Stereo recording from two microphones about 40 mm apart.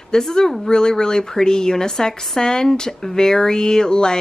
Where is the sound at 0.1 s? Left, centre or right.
Centre.